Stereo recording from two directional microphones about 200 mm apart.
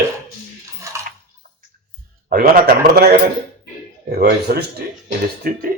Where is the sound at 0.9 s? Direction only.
15° right (ahead or behind).